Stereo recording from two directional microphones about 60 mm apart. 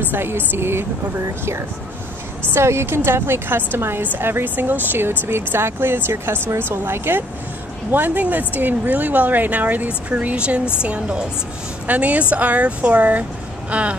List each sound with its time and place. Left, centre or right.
0.1 s a woman's voice: right
2.5 s a woman's voice: right